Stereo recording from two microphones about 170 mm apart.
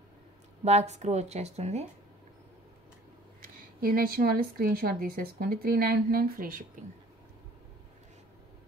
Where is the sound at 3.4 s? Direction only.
60° right (ahead or behind).